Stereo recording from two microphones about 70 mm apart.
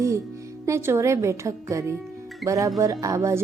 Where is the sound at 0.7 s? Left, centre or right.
Right.